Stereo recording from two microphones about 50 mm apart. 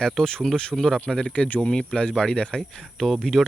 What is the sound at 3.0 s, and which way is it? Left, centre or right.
Speech, centre.